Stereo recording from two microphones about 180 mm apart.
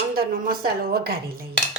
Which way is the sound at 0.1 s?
55° right (ahead or behind).